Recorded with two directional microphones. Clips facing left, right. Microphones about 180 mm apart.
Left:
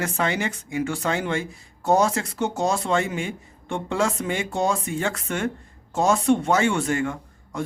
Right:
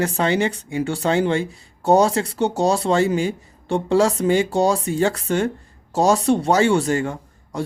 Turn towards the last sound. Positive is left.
turn(degrees=-35)  # may be behind; listen again after turning